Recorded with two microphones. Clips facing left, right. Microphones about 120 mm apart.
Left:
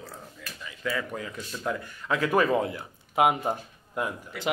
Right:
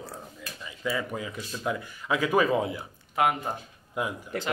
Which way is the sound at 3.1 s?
20° left (ahead or behind).